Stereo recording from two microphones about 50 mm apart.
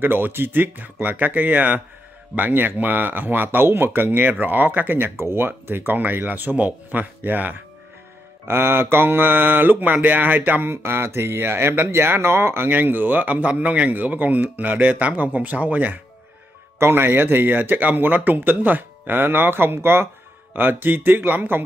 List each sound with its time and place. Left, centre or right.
0.0 s speech: right
5.9 s speech: right
8.5 s speech: right
12.7 s speech: right
16.7 s speech: right
20.5 s speech: right